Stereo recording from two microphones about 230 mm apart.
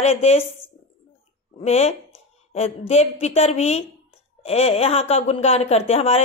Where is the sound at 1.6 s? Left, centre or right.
Left.